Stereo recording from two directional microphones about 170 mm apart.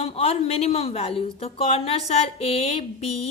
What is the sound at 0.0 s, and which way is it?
A woman's voice, 35° left (ahead or behind).